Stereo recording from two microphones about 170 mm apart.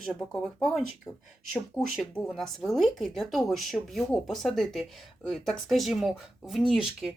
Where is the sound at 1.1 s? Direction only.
20° left (ahead or behind).